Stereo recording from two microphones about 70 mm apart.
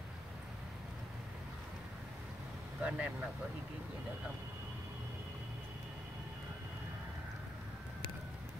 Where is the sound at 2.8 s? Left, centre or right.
Centre.